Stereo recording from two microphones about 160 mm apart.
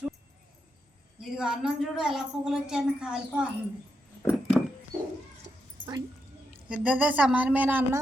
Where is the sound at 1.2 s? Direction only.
5° right (ahead or behind).